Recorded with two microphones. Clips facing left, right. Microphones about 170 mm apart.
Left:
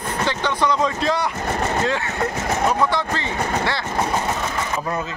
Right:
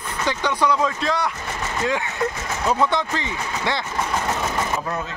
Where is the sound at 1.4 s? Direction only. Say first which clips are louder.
Left 6 dB; 50° left (ahead or behind).